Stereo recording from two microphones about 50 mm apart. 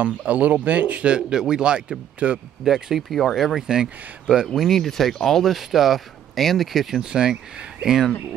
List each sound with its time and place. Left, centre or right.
0.3 s speech: right
2.6 s speech: centre
3.0 s speech: centre
4.6 s speech: centre
5.6 s speech: centre
7.1 s speech: centre